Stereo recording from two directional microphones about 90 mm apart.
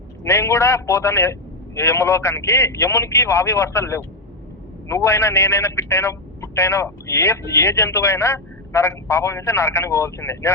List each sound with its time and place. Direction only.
0.3 s a man's voice: 30° left (ahead or behind)